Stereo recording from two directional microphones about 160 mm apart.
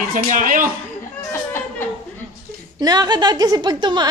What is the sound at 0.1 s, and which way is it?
Speech, 55° right (ahead or behind).